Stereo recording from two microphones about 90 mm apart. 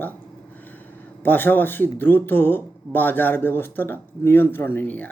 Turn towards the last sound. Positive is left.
turn(degrees=20)  # may be behind; listen again after turning